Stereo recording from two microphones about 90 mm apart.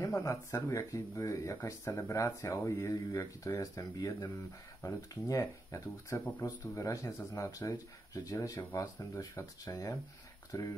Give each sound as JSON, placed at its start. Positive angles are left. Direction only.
{"t": 0.0, "sound": "speech", "side_deg": 35}